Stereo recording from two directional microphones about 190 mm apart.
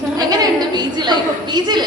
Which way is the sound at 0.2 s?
20° right (ahead or behind).